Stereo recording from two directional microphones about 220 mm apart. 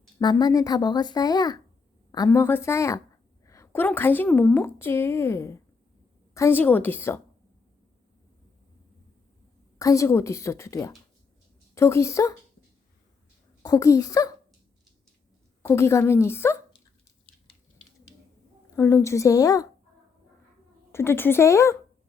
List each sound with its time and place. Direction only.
0.2 s a woman's voice: 20° left (ahead or behind)
9.7 s a woman's voice: 15° left (ahead or behind)
13.6 s a woman's voice: 15° left (ahead or behind)
15.6 s a woman's voice: 10° left (ahead or behind)
18.8 s a woman's voice: 15° left (ahead or behind)
20.9 s a woman's voice: 10° left (ahead or behind)